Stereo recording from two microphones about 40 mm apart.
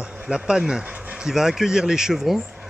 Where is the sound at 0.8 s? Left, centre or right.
Right.